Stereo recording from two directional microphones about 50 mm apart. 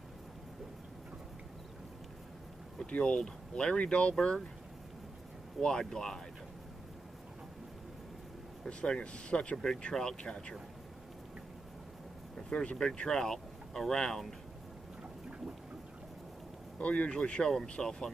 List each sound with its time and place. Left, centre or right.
2.9 s speech: centre
5.6 s speech: centre
8.6 s speech: centre
12.4 s speech: centre
16.7 s speech: left